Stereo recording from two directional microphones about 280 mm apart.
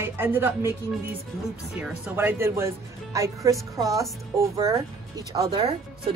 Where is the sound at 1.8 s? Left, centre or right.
Centre.